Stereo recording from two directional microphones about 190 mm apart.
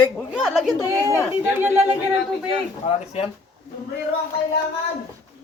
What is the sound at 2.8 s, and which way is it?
Speech, 30° left (ahead or behind).